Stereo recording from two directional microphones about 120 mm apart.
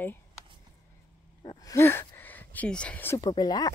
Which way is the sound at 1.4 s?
35° left (ahead or behind).